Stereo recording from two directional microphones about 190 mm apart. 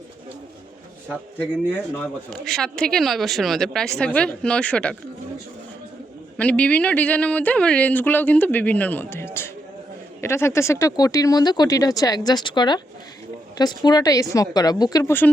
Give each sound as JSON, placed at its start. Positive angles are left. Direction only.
{"t": 2.0, "sound": "speech", "side_deg": 5}
{"t": 6.3, "sound": "speech", "side_deg": 5}